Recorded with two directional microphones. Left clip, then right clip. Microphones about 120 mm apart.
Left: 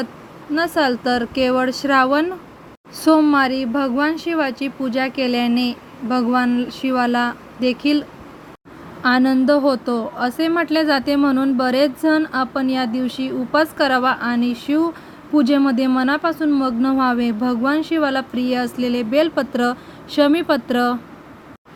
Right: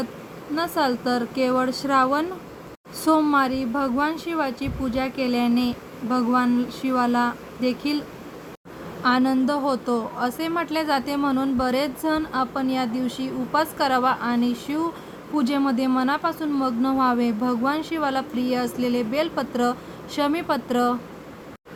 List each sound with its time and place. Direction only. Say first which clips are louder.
0.5 s a woman's voice: left 5 dB; 40° left (ahead or behind)
9.0 s a woman's voice: left 5 dB; 45° left (ahead or behind)